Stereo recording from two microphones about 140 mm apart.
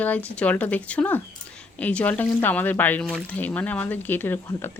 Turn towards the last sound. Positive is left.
turn(degrees=15)  # may be behind; listen again after turning